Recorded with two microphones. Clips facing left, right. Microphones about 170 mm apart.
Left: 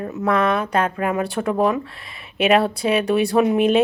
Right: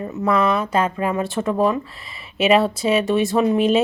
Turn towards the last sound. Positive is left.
turn(degrees=0)  # may be behind; listen again after turning